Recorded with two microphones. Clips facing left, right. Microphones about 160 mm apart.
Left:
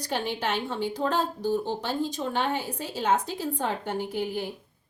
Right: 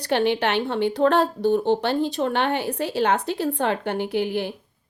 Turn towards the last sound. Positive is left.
turn(degrees=-75)  # may be behind; listen again after turning